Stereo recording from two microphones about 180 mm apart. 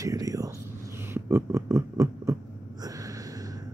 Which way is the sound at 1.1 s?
15° right (ahead or behind).